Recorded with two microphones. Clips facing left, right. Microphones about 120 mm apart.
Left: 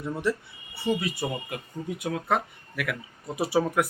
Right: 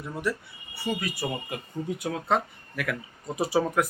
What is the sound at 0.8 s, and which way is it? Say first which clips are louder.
Speech: left 3 dB; 25° left (ahead or behind).